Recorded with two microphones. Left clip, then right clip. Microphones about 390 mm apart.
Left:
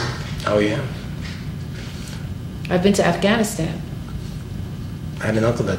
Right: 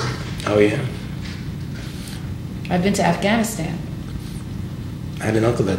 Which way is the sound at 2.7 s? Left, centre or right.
Left.